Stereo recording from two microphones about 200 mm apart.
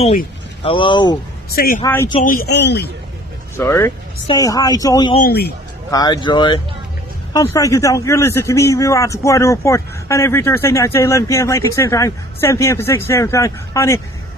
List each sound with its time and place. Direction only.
0.7 s speech: 25° left (ahead or behind)
1.5 s speech: 50° left (ahead or behind)
3.5 s a man's voice: 15° left (ahead or behind)
5.2 s speech: 50° left (ahead or behind)
5.9 s a man's voice: 20° left (ahead or behind)